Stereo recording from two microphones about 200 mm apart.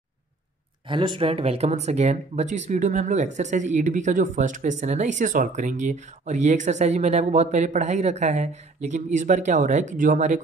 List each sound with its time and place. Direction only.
0.8 s speech: 25° right (ahead or behind)